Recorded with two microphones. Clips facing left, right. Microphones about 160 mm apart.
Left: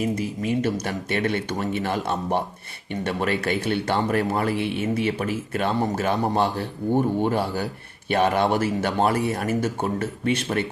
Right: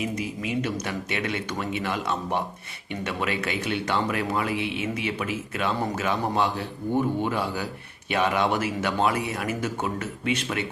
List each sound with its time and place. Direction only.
0.0 s speech: 45° left (ahead or behind)